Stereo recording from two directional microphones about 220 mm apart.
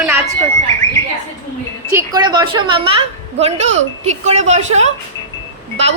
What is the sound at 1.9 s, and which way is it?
Speech, 15° right (ahead or behind).